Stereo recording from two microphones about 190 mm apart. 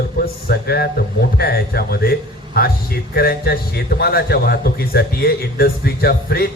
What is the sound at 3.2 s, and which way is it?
A man's voice, 55° left (ahead or behind).